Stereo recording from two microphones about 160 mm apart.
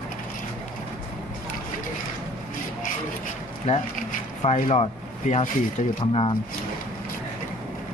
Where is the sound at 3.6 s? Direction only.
45° left (ahead or behind).